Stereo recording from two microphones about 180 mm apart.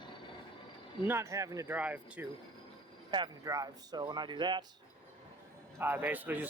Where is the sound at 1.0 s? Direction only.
15° right (ahead or behind).